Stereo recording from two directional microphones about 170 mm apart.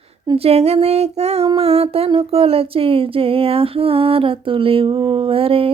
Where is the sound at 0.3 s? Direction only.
35° right (ahead or behind).